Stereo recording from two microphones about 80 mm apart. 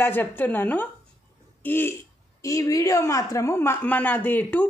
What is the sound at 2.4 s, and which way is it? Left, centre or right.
Speech, left.